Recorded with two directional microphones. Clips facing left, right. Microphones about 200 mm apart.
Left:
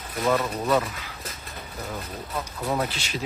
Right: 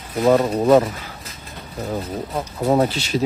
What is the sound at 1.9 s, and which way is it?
Speech, 40° right (ahead or behind).